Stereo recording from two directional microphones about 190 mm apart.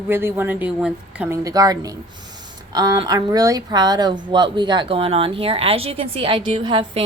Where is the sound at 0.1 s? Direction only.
10° right (ahead or behind).